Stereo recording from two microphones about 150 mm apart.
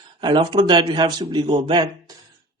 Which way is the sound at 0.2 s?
30° right (ahead or behind).